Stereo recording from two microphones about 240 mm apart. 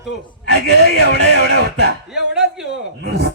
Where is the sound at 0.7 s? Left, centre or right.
Right.